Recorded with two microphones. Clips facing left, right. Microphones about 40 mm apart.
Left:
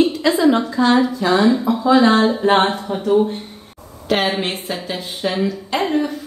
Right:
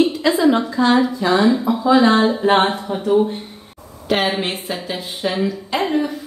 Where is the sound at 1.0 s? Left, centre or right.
Centre.